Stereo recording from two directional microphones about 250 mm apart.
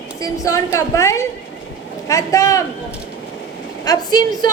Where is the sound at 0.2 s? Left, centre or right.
Centre.